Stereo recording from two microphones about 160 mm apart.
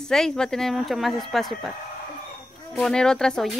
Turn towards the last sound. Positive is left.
turn(degrees=5)  # may be behind; listen again after turning